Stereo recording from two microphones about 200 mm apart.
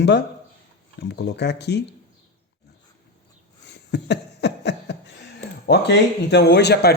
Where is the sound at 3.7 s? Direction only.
60° left (ahead or behind).